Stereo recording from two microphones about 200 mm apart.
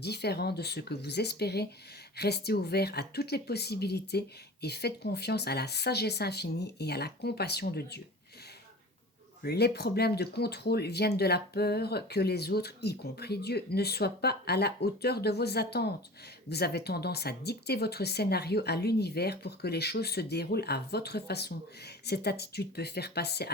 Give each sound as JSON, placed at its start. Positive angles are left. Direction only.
{"t": 0.0, "sound": "speech", "side_deg": 55}
{"t": 9.4, "sound": "speech", "side_deg": 55}